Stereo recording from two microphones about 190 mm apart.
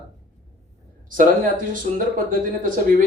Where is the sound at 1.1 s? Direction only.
45° right (ahead or behind).